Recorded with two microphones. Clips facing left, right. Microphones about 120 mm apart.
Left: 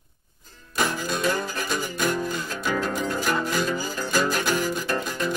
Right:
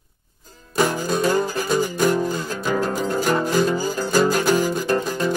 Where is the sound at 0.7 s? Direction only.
35° right (ahead or behind).